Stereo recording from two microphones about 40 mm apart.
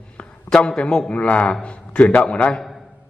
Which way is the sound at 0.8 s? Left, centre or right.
Left.